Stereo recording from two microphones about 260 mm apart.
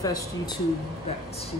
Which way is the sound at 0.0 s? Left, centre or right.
Centre.